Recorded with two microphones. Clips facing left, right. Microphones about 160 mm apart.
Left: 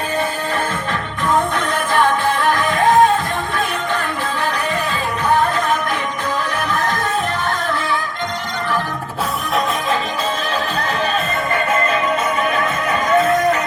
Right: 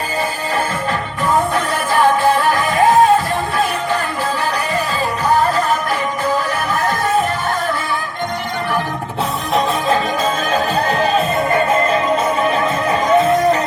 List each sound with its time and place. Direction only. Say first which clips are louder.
1.5 s music: right 1 dB; 10° right (ahead or behind)
10.5 s music: right 4 dB; 40° right (ahead or behind)
12.4 s music: right 3 dB; 30° right (ahead or behind)